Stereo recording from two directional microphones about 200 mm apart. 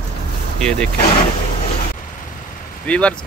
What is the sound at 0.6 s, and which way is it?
Speech, 5° left (ahead or behind).